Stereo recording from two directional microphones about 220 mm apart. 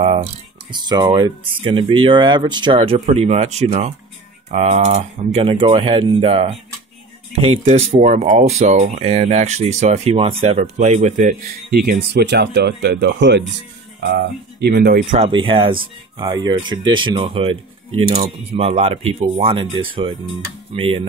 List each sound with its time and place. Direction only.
0.0 s speech: 30° right (ahead or behind); by 15.1 s 45° right (ahead or behind)
15.1 s speech: 25° right (ahead or behind)